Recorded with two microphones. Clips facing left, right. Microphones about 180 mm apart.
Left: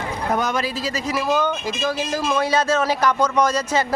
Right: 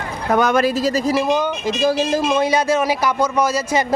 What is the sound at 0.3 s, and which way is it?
Speech, 55° right (ahead or behind).